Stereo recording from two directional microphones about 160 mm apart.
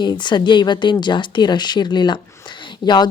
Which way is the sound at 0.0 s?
30° left (ahead or behind).